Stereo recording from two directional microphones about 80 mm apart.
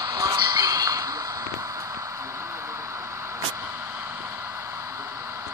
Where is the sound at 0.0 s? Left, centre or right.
Right.